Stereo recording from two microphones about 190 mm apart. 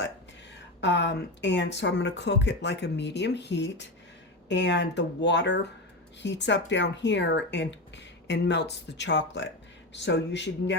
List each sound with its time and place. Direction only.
0.8 s speech: 65° left (ahead or behind)